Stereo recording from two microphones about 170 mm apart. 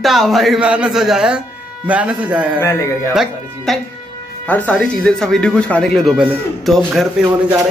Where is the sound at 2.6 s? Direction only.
15° left (ahead or behind).